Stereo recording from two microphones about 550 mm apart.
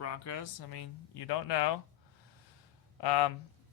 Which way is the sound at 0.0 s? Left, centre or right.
Left.